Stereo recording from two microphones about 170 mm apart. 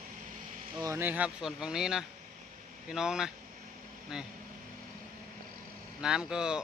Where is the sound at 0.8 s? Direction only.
15° right (ahead or behind).